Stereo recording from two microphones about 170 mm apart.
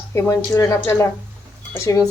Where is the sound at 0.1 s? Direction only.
20° left (ahead or behind).